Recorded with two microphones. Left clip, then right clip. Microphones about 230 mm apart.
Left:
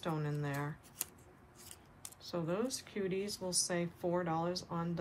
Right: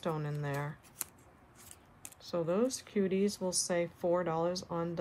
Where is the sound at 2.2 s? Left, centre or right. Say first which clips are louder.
Right 6 dB; right.